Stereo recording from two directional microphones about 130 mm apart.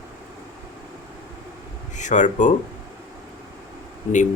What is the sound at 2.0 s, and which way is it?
Speech, 70° left (ahead or behind).